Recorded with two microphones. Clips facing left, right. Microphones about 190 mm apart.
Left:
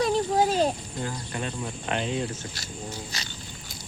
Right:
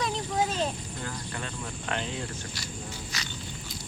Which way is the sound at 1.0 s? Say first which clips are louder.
Left 5 dB; 20° left (ahead or behind).